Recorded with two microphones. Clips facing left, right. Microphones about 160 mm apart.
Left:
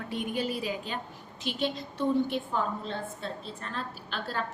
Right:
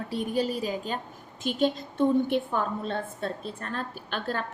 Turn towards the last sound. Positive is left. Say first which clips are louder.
# right 3 dB
turn(degrees=-50)  # may be behind; listen again after turning